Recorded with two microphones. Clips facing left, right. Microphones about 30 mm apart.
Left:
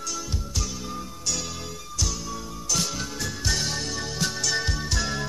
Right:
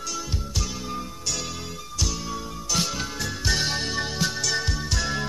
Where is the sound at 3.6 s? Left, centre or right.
Right.